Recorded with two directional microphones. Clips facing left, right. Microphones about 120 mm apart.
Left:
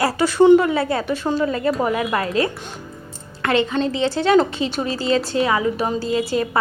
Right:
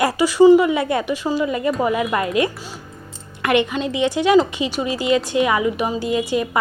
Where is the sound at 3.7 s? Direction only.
15° right (ahead or behind).